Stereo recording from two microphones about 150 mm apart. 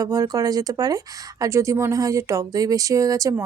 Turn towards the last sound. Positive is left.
turn(degrees=-20)  # may be behind; listen again after turning